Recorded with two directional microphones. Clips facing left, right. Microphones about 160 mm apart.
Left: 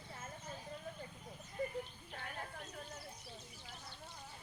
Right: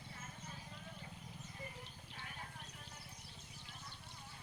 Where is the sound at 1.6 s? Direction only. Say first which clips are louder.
Left 15 dB; 60° left (ahead or behind).